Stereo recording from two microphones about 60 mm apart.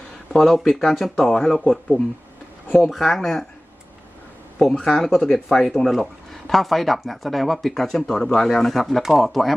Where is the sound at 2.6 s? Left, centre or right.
Left.